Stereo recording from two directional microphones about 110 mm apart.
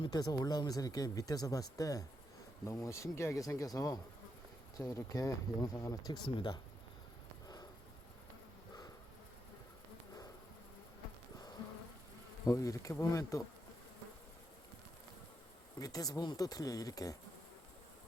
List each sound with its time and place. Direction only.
0.0 s speech: 40° left (ahead or behind)
7.4 s sniff: 35° left (ahead or behind)
12.5 s speech: 30° left (ahead or behind)
15.8 s speech: 35° left (ahead or behind)